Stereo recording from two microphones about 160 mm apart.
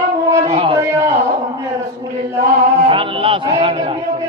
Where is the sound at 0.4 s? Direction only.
40° right (ahead or behind).